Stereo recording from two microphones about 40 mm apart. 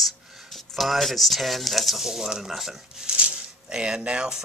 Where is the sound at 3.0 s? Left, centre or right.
Right.